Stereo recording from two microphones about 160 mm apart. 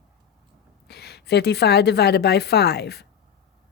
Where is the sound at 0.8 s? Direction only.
90° left.